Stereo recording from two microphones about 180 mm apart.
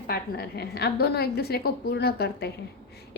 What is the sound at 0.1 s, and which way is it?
A woman's voice, 60° left (ahead or behind).